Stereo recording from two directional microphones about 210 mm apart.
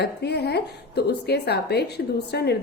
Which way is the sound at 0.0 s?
50° left (ahead or behind).